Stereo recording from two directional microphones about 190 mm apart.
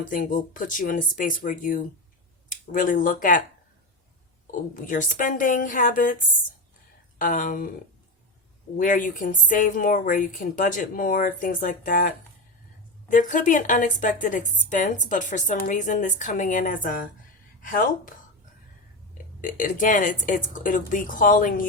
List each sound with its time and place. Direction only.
0.0 s a woman's voice: 45° left (ahead or behind)
4.7 s a woman's voice: 45° left (ahead or behind)
7.2 s a woman's voice: 45° left (ahead or behind)
8.8 s a woman's voice: 45° left (ahead or behind)
19.1 s a woman's voice: 45° left (ahead or behind)